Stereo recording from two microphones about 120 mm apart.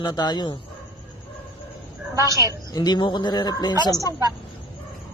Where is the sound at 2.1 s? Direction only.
30° right (ahead or behind).